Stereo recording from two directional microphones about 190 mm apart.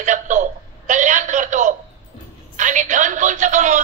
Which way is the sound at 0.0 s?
40° right (ahead or behind).